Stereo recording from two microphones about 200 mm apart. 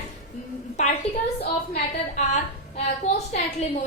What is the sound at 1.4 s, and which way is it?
A woman's voice, 30° left (ahead or behind).